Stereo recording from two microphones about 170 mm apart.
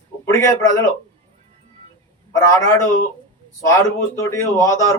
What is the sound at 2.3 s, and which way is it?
Speech, 20° left (ahead or behind).